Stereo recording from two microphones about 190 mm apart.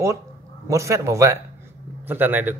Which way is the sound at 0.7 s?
15° right (ahead or behind).